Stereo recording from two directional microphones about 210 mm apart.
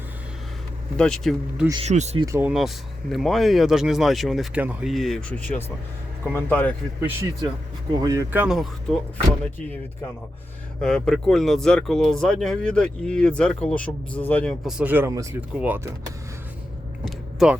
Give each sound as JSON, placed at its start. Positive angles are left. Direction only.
{"t": 0.9, "sound": "speech", "side_deg": 5}
{"t": 1.8, "sound": "speech", "side_deg": -30}
{"t": 2.2, "sound": "speech", "side_deg": -15}
{"t": 2.5, "sound": "speech", "side_deg": 0}
{"t": 7.0, "sound": "speech", "side_deg": -10}
{"t": 10.8, "sound": "speech", "side_deg": 5}
{"t": 17.1, "sound": "a sound", "side_deg": -5}